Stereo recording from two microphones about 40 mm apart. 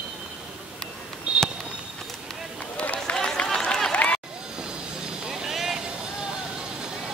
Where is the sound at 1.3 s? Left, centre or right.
Right.